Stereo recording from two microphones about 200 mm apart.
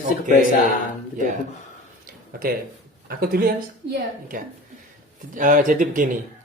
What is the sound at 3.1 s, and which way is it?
Speech, 45° right (ahead or behind).